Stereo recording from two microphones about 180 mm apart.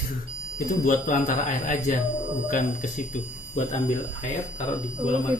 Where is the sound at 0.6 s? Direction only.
45° left (ahead or behind).